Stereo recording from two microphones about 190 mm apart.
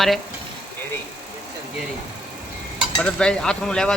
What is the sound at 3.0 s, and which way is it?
Stir, 5° left (ahead or behind).